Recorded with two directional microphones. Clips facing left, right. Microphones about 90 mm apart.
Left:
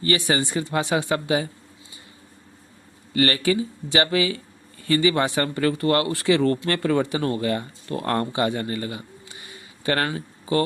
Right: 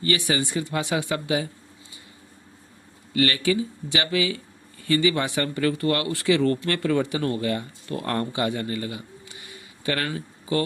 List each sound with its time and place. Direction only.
0.0 s speech: 35° left (ahead or behind)
3.2 s speech: 40° left (ahead or behind)